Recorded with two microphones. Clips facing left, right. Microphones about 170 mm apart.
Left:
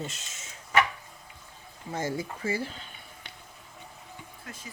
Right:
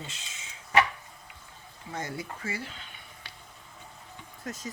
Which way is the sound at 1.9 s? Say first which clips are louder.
Left 5 dB; 25° left (ahead or behind).